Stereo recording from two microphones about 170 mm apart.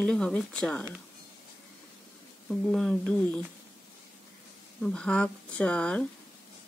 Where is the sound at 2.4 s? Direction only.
5° left (ahead or behind).